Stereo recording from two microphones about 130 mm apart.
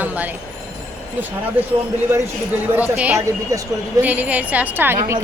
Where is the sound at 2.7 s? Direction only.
10° right (ahead or behind).